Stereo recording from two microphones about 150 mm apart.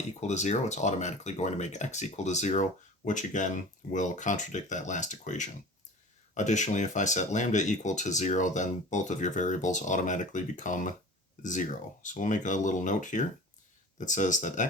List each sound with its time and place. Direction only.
0.2 s speech: 50° left (ahead or behind)